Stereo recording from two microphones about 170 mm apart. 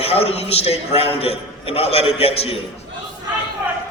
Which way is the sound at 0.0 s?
35° left (ahead or behind).